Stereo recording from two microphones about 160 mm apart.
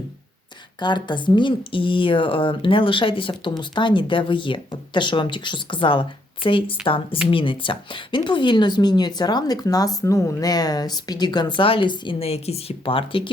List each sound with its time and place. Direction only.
0.8 s speech: 30° left (ahead or behind)